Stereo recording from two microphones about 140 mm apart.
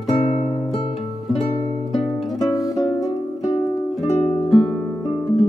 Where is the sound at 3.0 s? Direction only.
30° left (ahead or behind).